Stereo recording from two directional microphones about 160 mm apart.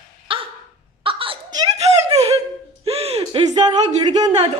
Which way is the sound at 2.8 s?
40° right (ahead or behind).